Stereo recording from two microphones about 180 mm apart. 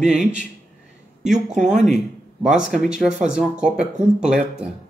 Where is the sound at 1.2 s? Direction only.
40° right (ahead or behind).